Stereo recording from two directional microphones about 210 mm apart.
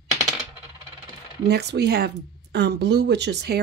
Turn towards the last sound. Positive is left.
turn(degrees=-55)  # may be behind; listen again after turning